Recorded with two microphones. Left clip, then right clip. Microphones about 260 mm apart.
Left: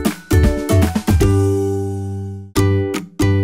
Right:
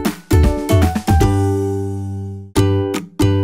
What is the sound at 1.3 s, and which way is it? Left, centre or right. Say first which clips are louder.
Music: left 1 dB; centre.